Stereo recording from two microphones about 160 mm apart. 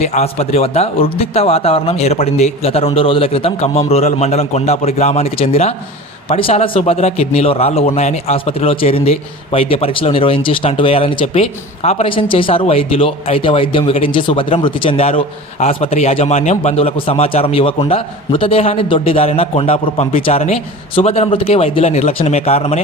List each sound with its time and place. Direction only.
0.0 s a man's voice: 45° left (ahead or behind)